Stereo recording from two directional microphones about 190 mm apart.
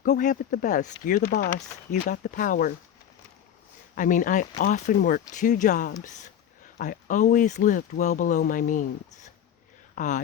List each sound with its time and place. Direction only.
0.0 s speech: 45° left (ahead or behind)
3.9 s speech: 45° left (ahead or behind)